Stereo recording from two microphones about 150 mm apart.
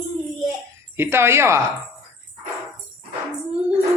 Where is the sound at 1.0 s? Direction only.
15° right (ahead or behind).